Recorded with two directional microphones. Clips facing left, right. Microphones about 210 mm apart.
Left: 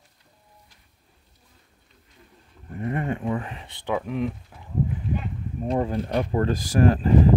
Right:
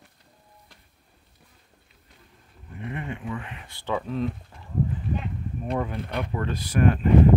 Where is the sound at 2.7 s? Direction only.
45° left (ahead or behind).